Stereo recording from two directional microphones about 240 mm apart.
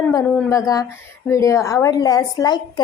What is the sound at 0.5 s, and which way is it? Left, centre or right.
A woman's voice, centre.